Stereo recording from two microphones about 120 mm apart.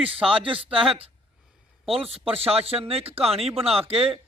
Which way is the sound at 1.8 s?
55° right (ahead or behind).